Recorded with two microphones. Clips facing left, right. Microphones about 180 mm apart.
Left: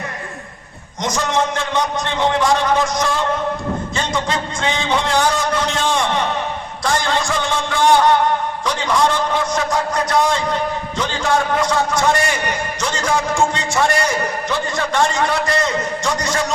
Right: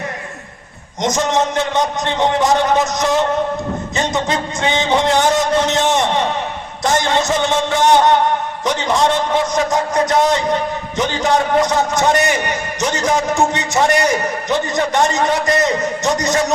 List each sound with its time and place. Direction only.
1.0 s a man's voice: 20° right (ahead or behind)
6.8 s music: 20° right (ahead or behind)
8.6 s a sound: 20° right (ahead or behind)
10.9 s a man's voice: 20° right (ahead or behind)